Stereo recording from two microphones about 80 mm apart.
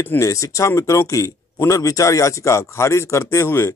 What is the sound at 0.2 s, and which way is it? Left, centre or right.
Speech, left.